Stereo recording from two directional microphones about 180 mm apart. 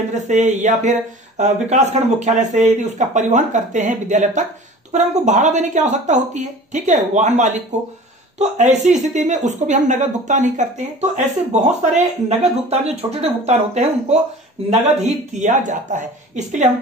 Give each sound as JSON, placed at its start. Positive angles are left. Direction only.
{"t": 0.1, "sound": "speech", "side_deg": -40}